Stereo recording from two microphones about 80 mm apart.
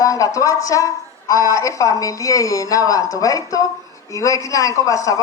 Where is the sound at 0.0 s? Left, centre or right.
Left.